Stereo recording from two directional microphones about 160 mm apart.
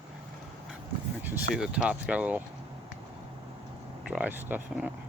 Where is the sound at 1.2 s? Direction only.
10° right (ahead or behind).